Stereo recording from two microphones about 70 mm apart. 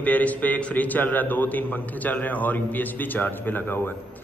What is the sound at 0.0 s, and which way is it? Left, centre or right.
A man's voice, left.